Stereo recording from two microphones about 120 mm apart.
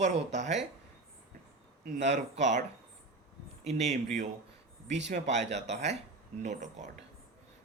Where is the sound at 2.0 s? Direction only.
80° right.